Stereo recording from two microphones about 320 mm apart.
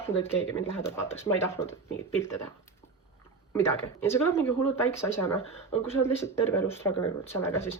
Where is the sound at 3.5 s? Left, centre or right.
Centre.